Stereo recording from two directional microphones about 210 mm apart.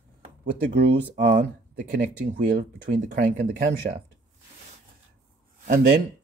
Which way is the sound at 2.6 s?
55° right (ahead or behind).